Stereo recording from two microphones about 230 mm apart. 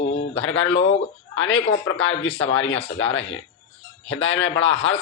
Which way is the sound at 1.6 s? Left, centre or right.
Left.